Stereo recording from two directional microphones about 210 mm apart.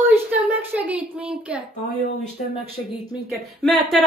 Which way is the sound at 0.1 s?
10° right (ahead or behind).